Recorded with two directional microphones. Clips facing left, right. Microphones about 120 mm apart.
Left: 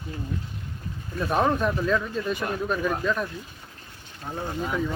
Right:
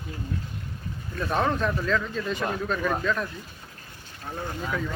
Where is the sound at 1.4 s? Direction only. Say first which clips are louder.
Left 3 dB; 10° left (ahead or behind).